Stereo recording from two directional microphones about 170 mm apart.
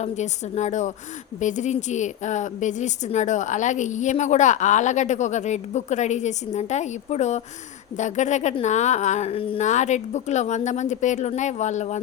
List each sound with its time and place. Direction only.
0.0 s a woman's voice: 40° left (ahead or behind)
9.6 s a woman's voice: 45° left (ahead or behind)